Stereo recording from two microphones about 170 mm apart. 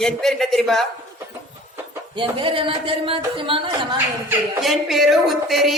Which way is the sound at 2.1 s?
30° right (ahead or behind).